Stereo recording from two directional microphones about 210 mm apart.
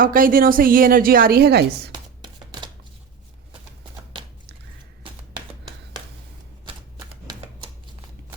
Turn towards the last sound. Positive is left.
turn(degrees=-20)  # may be behind; listen again after turning